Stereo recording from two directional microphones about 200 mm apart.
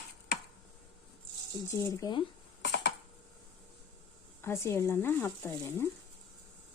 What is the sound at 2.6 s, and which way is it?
Typing, 60° left (ahead or behind).